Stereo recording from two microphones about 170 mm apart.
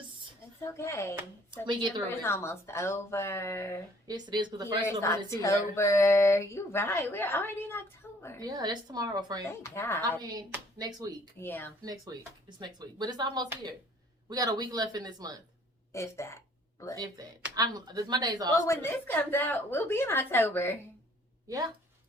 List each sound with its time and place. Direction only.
0.6 s speech: 15° left (ahead or behind)
1.6 s a woman's voice: 25° right (ahead or behind)
2.0 s speech: 15° left (ahead or behind)
4.0 s a woman's voice: 25° right (ahead or behind)
4.9 s speech: 15° left (ahead or behind)
8.4 s a woman's voice: 20° right (ahead or behind)
9.7 s speech: 15° left (ahead or behind)
10.0 s a woman's voice: 25° right (ahead or behind)
11.3 s speech: 10° left (ahead or behind)
11.8 s a woman's voice: 20° right (ahead or behind)
15.9 s speech: 15° left (ahead or behind)
17.5 s a woman's voice: 20° right (ahead or behind)
18.5 s speech: 15° left (ahead or behind)